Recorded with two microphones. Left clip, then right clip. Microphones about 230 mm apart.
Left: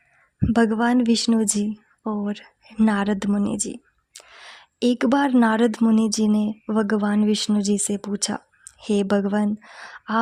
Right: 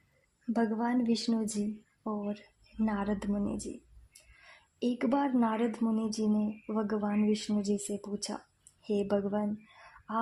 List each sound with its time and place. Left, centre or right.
0.5 s a woman's voice: left